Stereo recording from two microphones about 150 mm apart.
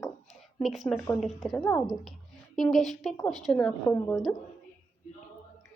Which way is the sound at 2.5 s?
Centre (ahead or behind).